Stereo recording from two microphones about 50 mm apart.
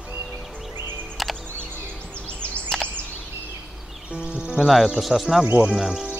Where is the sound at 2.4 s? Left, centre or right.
Left.